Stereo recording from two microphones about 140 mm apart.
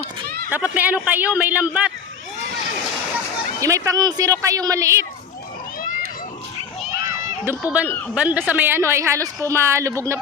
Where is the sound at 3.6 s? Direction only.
20° right (ahead or behind).